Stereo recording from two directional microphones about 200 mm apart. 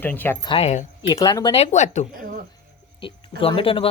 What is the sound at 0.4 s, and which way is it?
Speech, 30° left (ahead or behind).